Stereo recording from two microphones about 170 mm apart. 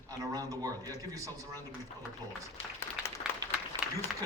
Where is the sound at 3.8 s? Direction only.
5° right (ahead or behind).